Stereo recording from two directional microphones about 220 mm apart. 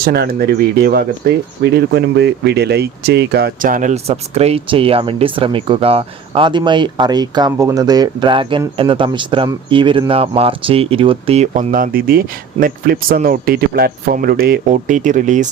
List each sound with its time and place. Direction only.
0.0 s speech: 45° right (ahead or behind)